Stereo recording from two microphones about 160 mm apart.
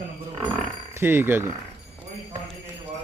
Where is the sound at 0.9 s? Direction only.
15° right (ahead or behind).